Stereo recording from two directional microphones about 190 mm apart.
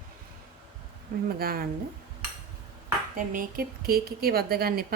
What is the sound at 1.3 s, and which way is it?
Speech, 50° right (ahead or behind).